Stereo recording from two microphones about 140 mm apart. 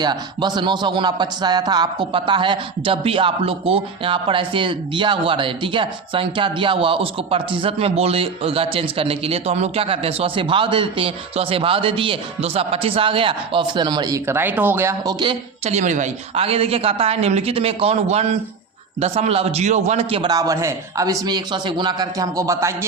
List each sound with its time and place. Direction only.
0.0 s a man's voice: 30° right (ahead or behind)
14.3 s speech: 15° right (ahead or behind)
15.6 s a woman's voice: 55° right (ahead or behind); by 22.9 s 20° right (ahead or behind)